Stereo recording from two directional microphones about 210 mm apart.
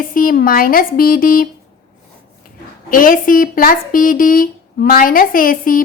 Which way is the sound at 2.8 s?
40° left (ahead or behind).